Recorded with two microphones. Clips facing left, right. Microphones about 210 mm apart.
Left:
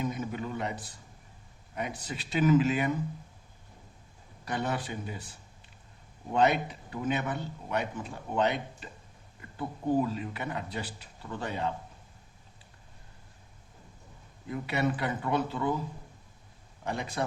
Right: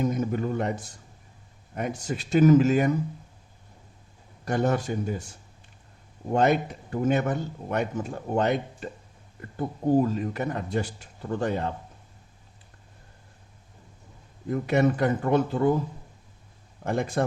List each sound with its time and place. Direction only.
0.0 s a man's voice: 45° right (ahead or behind)
4.4 s speech: 45° right (ahead or behind)
14.5 s speech: 45° right (ahead or behind)
16.8 s speech: 50° right (ahead or behind)